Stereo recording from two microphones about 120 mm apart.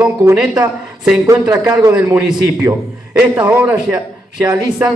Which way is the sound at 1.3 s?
25° right (ahead or behind).